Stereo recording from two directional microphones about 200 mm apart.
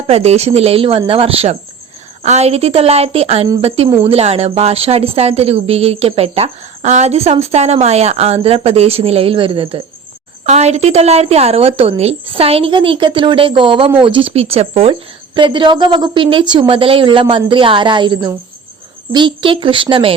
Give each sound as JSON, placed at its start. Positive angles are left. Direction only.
{"t": 0.1, "sound": "speech", "side_deg": -30}
{"t": 3.8, "sound": "speech", "side_deg": -10}
{"t": 4.1, "sound": "speech", "side_deg": -30}